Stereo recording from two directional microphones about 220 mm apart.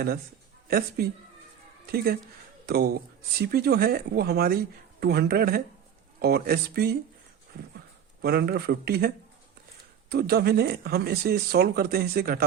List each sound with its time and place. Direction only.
0.7 s speech: 40° right (ahead or behind)
2.6 s speech: 45° right (ahead or behind)
7.5 s horse: 40° right (ahead or behind)
8.2 s speech: 45° right (ahead or behind)